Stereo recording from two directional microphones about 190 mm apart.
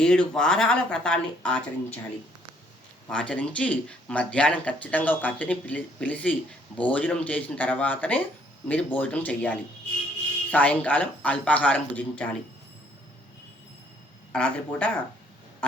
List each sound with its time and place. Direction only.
0.0 s speech: 5° left (ahead or behind)
3.1 s speech: 5° left (ahead or behind)
14.3 s speech: 5° left (ahead or behind)